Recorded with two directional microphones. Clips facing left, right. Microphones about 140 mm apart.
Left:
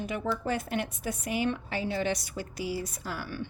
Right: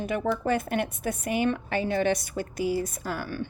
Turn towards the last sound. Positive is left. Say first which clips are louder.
# right 4 dB
turn(degrees=-50)  # may be behind; listen again after turning